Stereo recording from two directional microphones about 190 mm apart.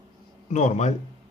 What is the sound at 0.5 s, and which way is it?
Speech, 40° left (ahead or behind).